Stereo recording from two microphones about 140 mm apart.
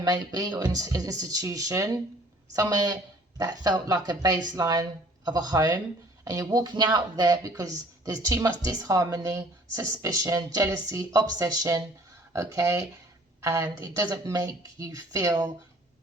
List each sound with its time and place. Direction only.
0.0 s speech: 30° right (ahead or behind)